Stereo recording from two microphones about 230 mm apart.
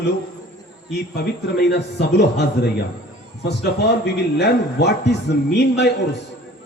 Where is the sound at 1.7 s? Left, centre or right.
Left.